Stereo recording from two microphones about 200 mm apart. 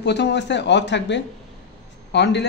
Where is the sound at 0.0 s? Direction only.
60° left (ahead or behind).